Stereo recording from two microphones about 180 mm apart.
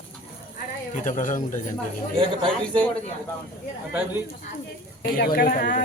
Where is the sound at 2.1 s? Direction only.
30° right (ahead or behind).